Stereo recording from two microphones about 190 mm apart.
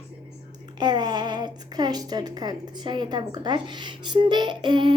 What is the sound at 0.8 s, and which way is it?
A woman's voice, 20° right (ahead or behind).